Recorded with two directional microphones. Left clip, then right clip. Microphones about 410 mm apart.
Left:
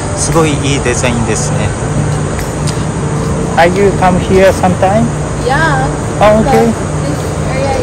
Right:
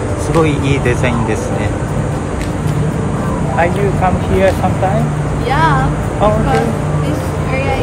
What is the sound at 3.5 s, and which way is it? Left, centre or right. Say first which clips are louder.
Speech: left 7 dB; left.